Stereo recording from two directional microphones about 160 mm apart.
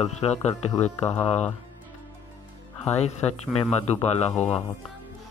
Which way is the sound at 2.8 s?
45° left (ahead or behind).